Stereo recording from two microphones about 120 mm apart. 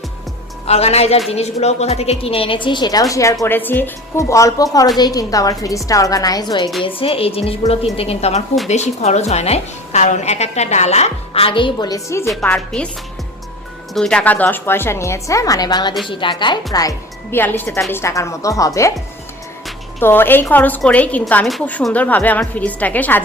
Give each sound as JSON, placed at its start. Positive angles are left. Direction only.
{"t": 0.7, "sound": "a woman's voice", "side_deg": 60}
{"t": 3.4, "sound": "a woman's voice", "side_deg": 15}
{"t": 4.2, "sound": "a woman's voice", "side_deg": 25}
{"t": 6.8, "sound": "a woman's voice", "side_deg": 50}
{"t": 12.5, "sound": "a woman's voice", "side_deg": 5}
{"t": 13.9, "sound": "a woman's voice", "side_deg": 5}
{"t": 17.3, "sound": "a woman's voice", "side_deg": 20}
{"t": 20.0, "sound": "a woman's voice", "side_deg": 20}